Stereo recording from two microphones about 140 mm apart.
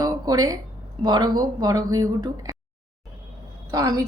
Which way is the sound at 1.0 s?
30° right (ahead or behind).